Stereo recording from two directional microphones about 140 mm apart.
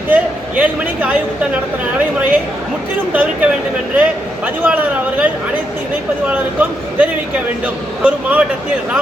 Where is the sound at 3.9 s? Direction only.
10° right (ahead or behind).